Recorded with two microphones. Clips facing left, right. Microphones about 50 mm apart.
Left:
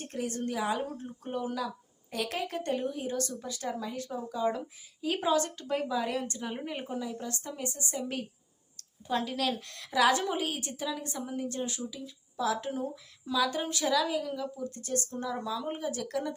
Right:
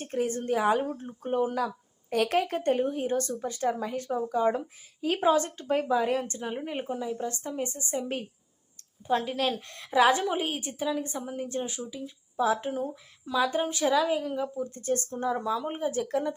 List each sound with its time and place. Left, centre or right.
0.1 s a woman's voice: right
0.8 s a woman's voice: right
1.5 s a woman's voice: right
4.4 s a woman's voice: right
5.3 s a woman's voice: right
6.4 s speech: centre
7.0 s a woman's voice: right
9.2 s a woman's voice: centre